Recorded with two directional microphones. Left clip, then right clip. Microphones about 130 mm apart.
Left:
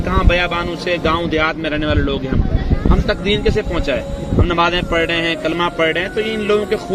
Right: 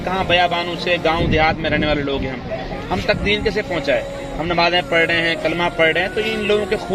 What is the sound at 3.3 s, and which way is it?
A man's voice, 20° left (ahead or behind).